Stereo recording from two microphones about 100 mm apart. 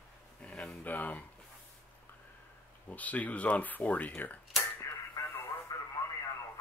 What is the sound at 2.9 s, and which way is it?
Speech, 15° left (ahead or behind).